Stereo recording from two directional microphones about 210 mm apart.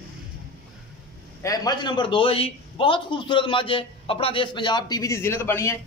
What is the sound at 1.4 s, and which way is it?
A man's voice, 15° left (ahead or behind).